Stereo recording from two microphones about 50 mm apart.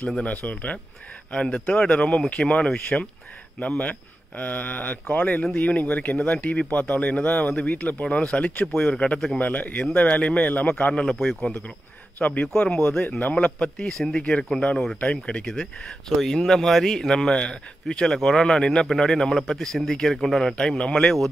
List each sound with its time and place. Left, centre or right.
0.2 s speech: left
1.3 s speech: left
4.4 s speech: left
9.4 s speech: left
11.1 s a man's voice: centre
12.2 s a man's voice: left